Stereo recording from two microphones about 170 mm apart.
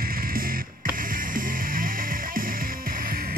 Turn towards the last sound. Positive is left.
turn(degrees=-55)  # may be behind; listen again after turning